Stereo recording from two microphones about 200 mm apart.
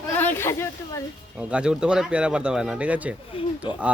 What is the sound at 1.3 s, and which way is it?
Speech, 5° right (ahead or behind).